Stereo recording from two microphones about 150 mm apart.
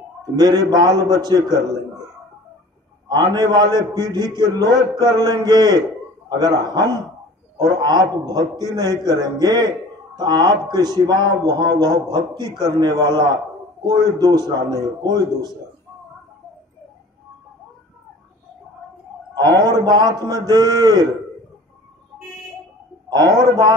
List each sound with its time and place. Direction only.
0.2 s a man's voice: 25° right (ahead or behind)
0.9 s a man's voice: 20° left (ahead or behind)
1.2 s a man's voice: 25° right (ahead or behind)
3.1 s a man's voice: 30° right (ahead or behind)
19.3 s a man's voice: 25° right (ahead or behind)
23.0 s a man's voice: 30° right (ahead or behind)